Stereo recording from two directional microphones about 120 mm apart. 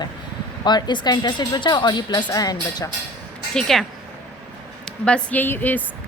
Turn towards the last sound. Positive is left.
turn(degrees=15)  # may be behind; listen again after turning